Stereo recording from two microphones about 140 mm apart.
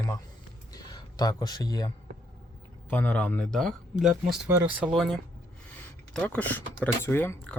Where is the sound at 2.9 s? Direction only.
10° left (ahead or behind); by 4.5 s 5° right (ahead or behind).